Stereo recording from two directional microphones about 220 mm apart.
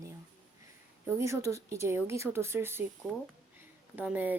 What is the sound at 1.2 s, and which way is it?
Speech, 15° right (ahead or behind).